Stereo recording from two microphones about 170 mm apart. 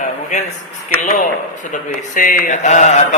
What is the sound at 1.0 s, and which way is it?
Speech, 50° left (ahead or behind).